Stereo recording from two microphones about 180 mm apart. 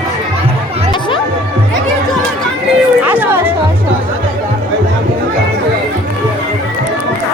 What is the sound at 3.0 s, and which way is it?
Music, 10° right (ahead or behind).